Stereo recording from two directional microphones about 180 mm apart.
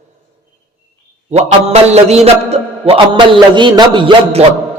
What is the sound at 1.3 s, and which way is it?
A man's voice, 35° right (ahead or behind).